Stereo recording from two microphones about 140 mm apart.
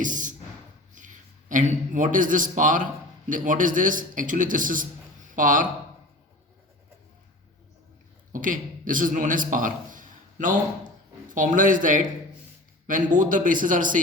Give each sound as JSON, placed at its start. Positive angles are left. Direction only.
{"t": 0.0, "sound": "a sound", "side_deg": -65}
{"t": 0.9, "sound": "a man's voice", "side_deg": -65}
{"t": 8.3, "sound": "a man's voice", "side_deg": -75}